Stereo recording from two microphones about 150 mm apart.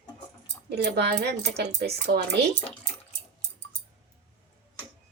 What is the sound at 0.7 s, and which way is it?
Speech, 90° right.